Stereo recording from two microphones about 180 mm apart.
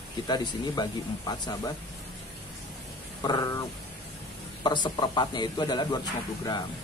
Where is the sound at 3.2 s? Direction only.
25° left (ahead or behind).